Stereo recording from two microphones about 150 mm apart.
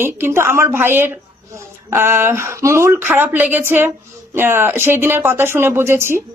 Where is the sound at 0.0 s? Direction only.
15° right (ahead or behind).